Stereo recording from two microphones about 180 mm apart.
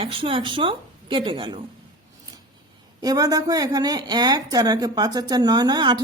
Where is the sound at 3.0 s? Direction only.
20° right (ahead or behind).